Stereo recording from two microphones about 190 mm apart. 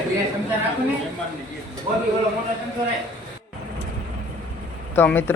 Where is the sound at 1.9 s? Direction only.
30° right (ahead or behind).